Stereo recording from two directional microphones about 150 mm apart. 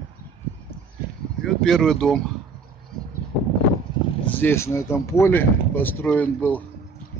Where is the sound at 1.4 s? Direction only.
5° left (ahead or behind).